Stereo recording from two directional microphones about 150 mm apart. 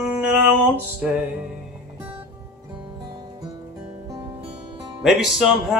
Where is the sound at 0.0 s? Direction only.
10° right (ahead or behind).